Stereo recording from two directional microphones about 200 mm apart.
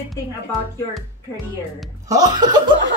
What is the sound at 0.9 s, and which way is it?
Speech, centre (ahead or behind).